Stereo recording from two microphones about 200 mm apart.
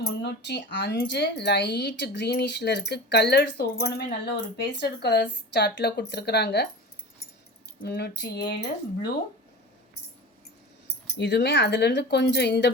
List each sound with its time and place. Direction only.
0.0 s speech: 60° left (ahead or behind)
7.8 s speech: 55° left (ahead or behind)
11.2 s speech: 60° left (ahead or behind)